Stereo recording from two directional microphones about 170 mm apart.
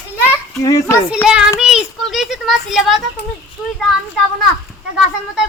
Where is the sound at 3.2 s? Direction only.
80° left.